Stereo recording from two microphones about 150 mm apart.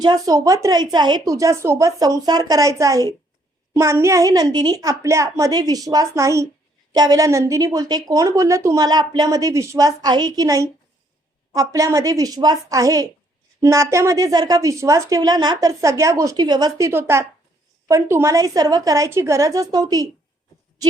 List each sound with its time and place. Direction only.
0.0 s a woman's voice: 25° right (ahead or behind)